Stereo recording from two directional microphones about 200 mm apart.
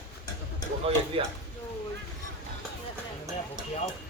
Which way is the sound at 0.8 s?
30° right (ahead or behind).